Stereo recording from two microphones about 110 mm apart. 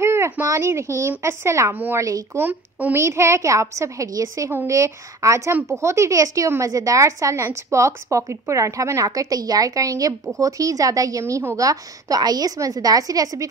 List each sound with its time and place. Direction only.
0.0 s a woman's voice: 25° right (ahead or behind)